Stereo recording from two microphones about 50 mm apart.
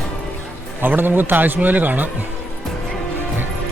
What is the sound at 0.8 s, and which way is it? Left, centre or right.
Speech, right.